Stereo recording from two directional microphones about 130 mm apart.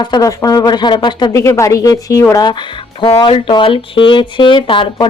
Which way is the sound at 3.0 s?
45° left (ahead or behind).